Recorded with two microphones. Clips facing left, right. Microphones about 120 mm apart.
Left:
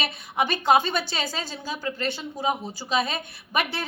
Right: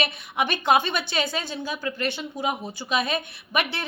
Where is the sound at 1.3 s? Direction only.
60° right (ahead or behind).